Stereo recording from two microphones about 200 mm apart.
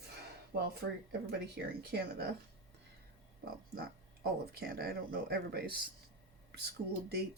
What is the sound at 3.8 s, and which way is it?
Speech, 50° right (ahead or behind).